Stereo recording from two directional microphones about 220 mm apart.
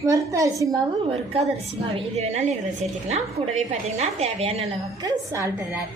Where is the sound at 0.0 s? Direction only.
15° right (ahead or behind).